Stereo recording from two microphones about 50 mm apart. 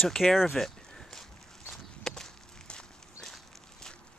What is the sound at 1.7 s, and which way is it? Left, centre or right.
Walk, centre.